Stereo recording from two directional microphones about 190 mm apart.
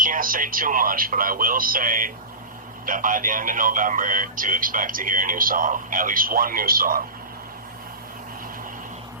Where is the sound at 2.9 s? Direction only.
45° right (ahead or behind).